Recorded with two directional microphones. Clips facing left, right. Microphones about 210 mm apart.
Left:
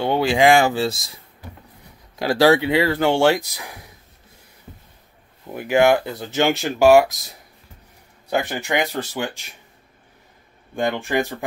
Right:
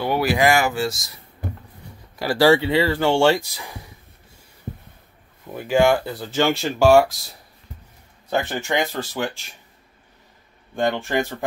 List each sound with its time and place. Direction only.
0.0 s speech: 25° left (ahead or behind)
2.1 s speech: 15° left (ahead or behind)
5.5 s speech: 15° left (ahead or behind)
8.3 s speech: 15° left (ahead or behind)
10.8 s speech: 10° left (ahead or behind)